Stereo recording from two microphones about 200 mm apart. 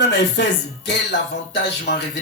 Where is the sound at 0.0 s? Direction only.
60° left (ahead or behind).